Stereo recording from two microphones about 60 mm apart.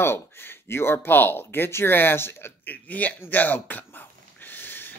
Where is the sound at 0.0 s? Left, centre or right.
Left.